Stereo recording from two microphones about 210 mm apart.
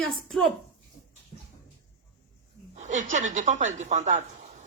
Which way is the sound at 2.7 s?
35° right (ahead or behind).